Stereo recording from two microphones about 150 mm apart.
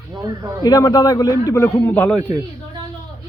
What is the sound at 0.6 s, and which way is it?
Speech, 25° left (ahead or behind).